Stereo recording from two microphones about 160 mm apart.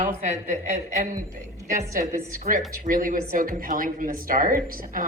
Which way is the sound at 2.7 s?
55° right (ahead or behind).